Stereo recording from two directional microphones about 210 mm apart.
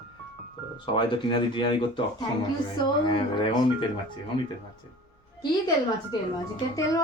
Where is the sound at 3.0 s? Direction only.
25° left (ahead or behind).